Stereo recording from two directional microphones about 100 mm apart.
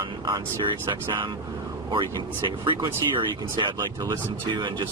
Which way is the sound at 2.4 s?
50° right (ahead or behind).